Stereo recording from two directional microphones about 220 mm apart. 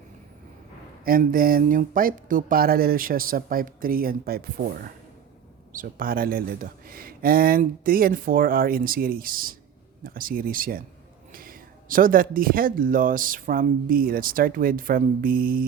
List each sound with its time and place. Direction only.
1.0 s speech: 40° right (ahead or behind)